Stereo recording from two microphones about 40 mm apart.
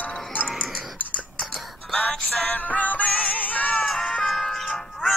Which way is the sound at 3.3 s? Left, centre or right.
Left.